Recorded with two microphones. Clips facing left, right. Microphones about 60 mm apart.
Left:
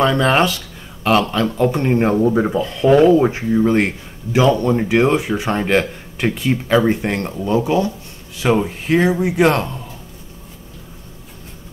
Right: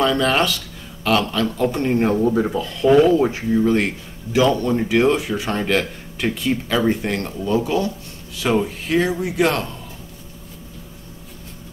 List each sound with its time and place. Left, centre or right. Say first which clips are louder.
0.0 s speech: left 3 dB; left